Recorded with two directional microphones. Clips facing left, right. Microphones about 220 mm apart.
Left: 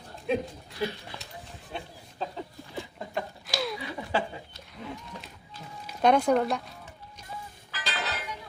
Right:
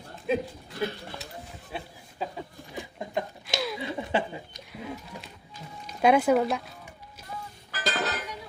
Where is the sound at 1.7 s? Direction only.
10° right (ahead or behind).